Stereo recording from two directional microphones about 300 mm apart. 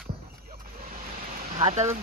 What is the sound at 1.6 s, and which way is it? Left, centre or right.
Speech, right.